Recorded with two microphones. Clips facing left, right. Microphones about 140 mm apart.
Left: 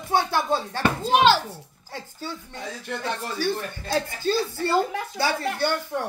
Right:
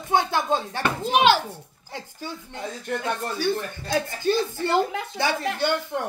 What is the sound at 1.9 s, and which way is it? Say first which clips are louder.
Speech: even; 15° right (ahead or behind).